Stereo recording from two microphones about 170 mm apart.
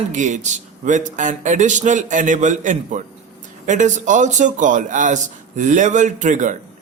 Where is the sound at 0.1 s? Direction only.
45° right (ahead or behind).